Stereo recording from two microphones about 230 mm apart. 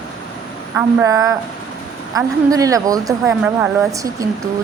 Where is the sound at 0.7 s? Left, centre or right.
Centre.